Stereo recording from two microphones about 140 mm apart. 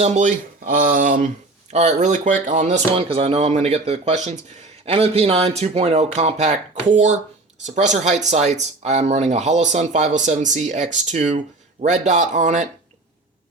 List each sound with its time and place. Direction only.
0.0 s speech: 55° right (ahead or behind); by 1.3 s 70° right (ahead or behind)
1.7 s speech: 55° right (ahead or behind)
2.9 s speech: 45° right (ahead or behind); by 12.6 s 60° right (ahead or behind)